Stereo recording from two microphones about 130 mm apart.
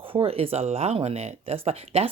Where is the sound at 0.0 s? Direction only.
45° right (ahead or behind).